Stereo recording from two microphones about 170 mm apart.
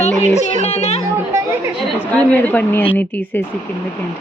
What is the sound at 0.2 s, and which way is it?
Speech, 40° left (ahead or behind).